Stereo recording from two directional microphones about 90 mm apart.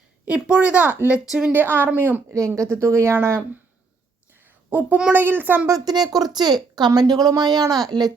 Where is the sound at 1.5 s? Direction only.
20° right (ahead or behind).